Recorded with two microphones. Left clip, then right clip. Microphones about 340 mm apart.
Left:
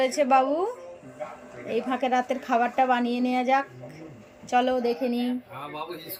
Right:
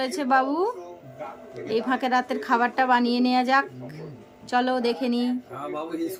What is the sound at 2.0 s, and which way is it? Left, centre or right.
A woman's voice, right.